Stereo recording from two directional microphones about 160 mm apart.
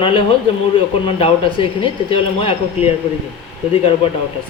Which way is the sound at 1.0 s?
35° left (ahead or behind).